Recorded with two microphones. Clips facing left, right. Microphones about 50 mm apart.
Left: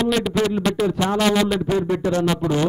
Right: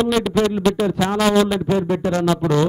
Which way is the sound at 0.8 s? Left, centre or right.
Right.